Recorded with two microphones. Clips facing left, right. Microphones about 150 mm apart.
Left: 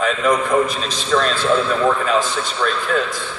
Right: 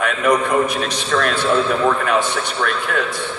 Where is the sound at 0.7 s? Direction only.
65° right (ahead or behind).